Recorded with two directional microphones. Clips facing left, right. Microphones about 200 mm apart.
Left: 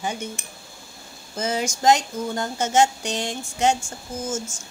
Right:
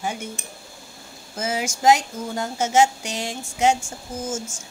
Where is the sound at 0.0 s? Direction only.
5° right (ahead or behind).